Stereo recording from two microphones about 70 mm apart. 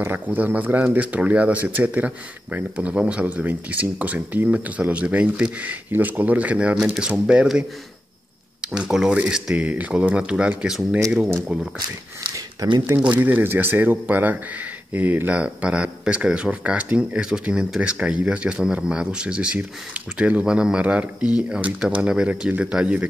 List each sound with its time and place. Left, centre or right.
0.0 s speech: right
8.5 s speech: centre
13.1 s speech: right